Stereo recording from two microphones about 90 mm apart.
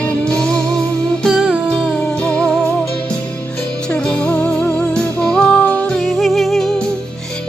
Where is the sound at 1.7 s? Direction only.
Centre (ahead or behind).